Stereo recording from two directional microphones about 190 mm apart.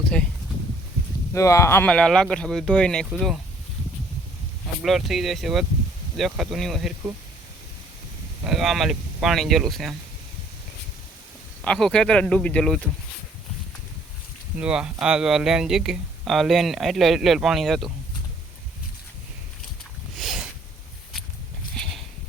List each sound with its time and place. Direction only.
1.3 s speech: 15° left (ahead or behind); by 3.3 s 5° right (ahead or behind)
4.8 s speech: centre (ahead or behind)
8.4 s speech: centre (ahead or behind)
11.6 s speech: 5° left (ahead or behind)
14.6 s speech: 5° right (ahead or behind)
20.1 s a sound: centre (ahead or behind)
21.8 s horse: centre (ahead or behind)